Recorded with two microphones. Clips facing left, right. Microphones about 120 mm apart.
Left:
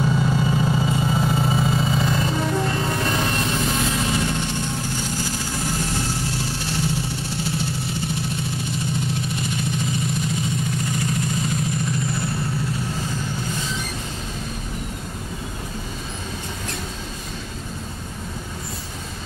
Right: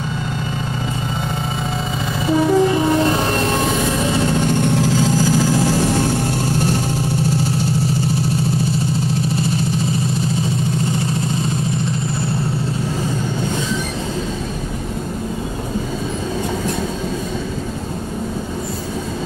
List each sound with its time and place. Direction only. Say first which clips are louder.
1.8 s music: left 1 dB; centre (ahead or behind)
4.5 s vehicle: right 10 dB; 65° right (ahead or behind)